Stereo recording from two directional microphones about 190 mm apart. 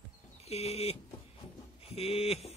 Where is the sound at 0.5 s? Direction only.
35° left (ahead or behind).